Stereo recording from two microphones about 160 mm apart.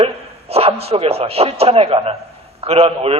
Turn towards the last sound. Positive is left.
turn(degrees=-40)  # may be behind; listen again after turning